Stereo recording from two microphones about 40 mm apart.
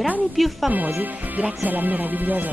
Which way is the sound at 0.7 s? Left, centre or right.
Right.